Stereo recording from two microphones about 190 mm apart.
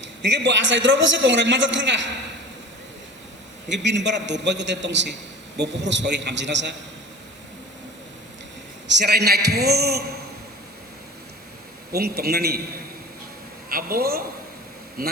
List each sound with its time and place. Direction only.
0.0 s a man's voice: 70° right (ahead or behind)
3.7 s a man's voice: 65° right (ahead or behind)
9.0 s a man's voice: 55° right (ahead or behind)
11.9 s a man's voice: 55° right (ahead or behind)
13.7 s a man's voice: 50° right (ahead or behind)